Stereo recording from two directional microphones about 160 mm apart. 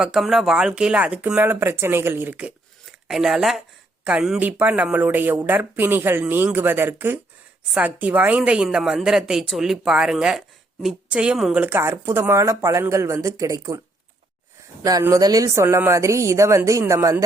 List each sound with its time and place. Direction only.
0.0 s a woman's voice: 5° right (ahead or behind); by 13.8 s 20° right (ahead or behind)
14.8 s speech: 20° right (ahead or behind)